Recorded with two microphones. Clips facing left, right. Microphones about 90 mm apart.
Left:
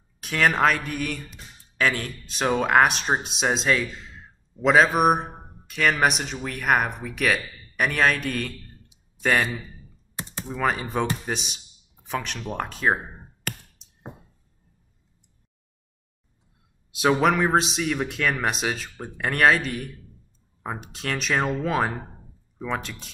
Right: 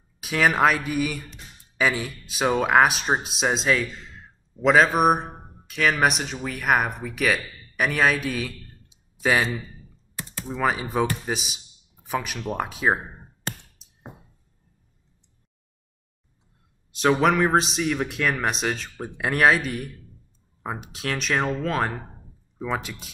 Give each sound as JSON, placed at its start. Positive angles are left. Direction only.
{"t": 0.2, "sound": "speech", "side_deg": -5}
{"t": 10.1, "sound": "typing", "side_deg": 25}
{"t": 10.4, "sound": "a man's voice", "side_deg": -5}
{"t": 13.8, "sound": "a sound", "side_deg": -5}
{"t": 16.9, "sound": "speech", "side_deg": 5}
{"t": 19.0, "sound": "speech", "side_deg": -10}
{"t": 22.6, "sound": "speech", "side_deg": -5}